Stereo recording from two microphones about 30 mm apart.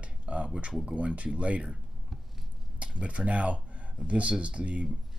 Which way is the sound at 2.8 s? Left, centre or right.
Right.